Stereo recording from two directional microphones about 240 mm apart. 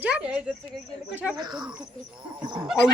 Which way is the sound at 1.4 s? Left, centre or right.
Centre.